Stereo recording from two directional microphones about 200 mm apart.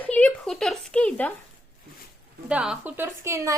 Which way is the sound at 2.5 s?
5° right (ahead or behind).